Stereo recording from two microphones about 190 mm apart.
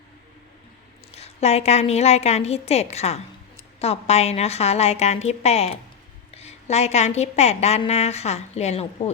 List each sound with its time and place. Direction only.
1.1 s a woman's voice: 35° left (ahead or behind)